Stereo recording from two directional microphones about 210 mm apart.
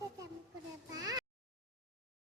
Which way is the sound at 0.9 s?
15° right (ahead or behind).